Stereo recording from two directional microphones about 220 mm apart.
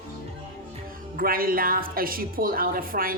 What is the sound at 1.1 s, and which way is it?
Speech, 40° right (ahead or behind).